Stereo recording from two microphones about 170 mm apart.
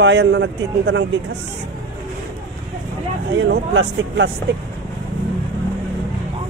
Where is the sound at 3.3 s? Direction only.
90° right.